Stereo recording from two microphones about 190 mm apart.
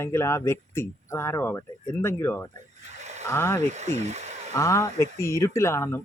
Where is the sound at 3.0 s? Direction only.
35° right (ahead or behind).